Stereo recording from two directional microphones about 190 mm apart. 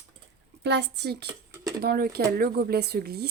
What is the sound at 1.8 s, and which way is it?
Speech, 55° right (ahead or behind).